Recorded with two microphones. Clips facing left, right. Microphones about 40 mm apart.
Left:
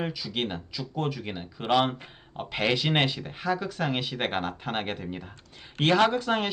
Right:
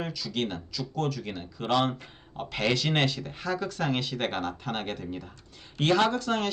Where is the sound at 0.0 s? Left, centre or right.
Centre.